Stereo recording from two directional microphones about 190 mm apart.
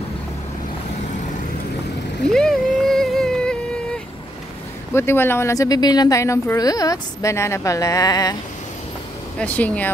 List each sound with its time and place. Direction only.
2.2 s music: 5° left (ahead or behind)
4.9 s speech: 10° left (ahead or behind)
9.4 s speech: 5° left (ahead or behind)